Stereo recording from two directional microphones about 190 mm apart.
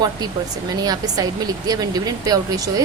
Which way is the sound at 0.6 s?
20° right (ahead or behind).